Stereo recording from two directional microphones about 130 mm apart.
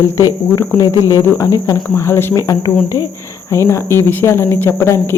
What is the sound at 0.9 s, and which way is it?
Speech, 25° right (ahead or behind).